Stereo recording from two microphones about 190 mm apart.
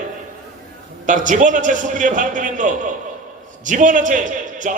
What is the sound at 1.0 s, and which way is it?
Speech, 40° right (ahead or behind).